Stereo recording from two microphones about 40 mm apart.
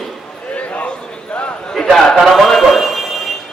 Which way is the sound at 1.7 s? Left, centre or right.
Centre.